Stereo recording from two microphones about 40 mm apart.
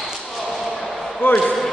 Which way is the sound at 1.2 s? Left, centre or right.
Left.